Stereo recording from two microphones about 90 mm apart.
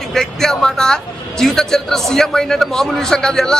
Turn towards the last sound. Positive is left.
turn(degrees=5)  # may be behind; listen again after turning